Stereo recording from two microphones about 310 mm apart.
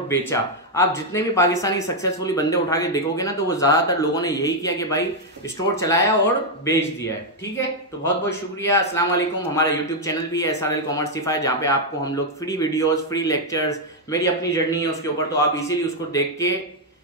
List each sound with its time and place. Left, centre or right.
0.3 s speech: centre
8.3 s speech: centre